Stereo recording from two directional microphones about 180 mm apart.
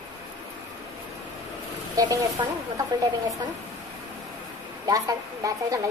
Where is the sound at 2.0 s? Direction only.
20° right (ahead or behind).